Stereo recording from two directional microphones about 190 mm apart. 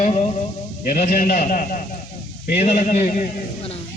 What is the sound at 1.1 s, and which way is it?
A man's voice, 50° left (ahead or behind).